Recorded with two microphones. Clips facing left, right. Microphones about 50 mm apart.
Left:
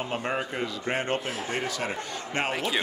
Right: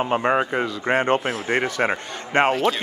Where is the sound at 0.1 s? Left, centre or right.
Right.